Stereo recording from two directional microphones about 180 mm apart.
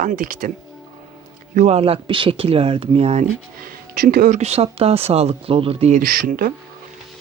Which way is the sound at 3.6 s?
55° right (ahead or behind).